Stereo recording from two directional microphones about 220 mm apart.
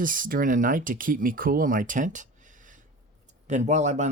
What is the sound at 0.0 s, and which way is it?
Speech, 40° right (ahead or behind).